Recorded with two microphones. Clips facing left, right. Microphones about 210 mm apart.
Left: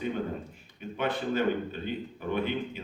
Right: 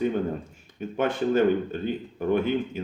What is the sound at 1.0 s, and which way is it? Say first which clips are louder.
Speech: right 6 dB; 45° right (ahead or behind).